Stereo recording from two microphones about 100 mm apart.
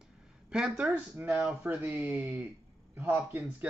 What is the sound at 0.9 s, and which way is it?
Speech, 20° right (ahead or behind).